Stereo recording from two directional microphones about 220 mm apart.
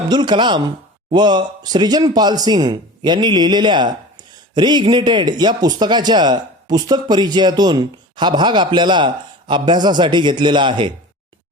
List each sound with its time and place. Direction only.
0.1 s a man's voice: 20° right (ahead or behind)